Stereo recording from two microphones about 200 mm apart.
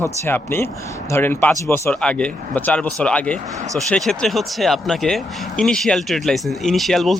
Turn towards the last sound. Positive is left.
turn(degrees=0)  # may be behind; listen again after turning